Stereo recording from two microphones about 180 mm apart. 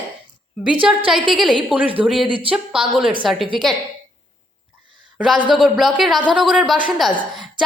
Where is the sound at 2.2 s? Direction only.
30° right (ahead or behind).